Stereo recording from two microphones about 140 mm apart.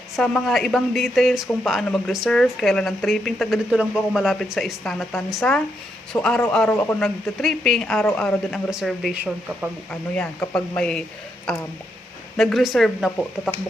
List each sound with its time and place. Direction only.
0.2 s speech: 5° left (ahead or behind)
10.5 s speech: 5° left (ahead or behind)